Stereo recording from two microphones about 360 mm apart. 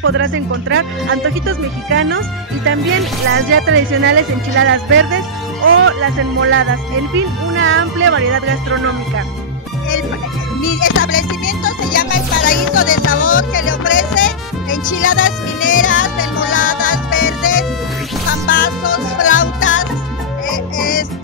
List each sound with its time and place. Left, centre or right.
0.0 s speech: right
10.6 s speech: left
11.1 s music: left
15.0 s music: left
18.5 s music: left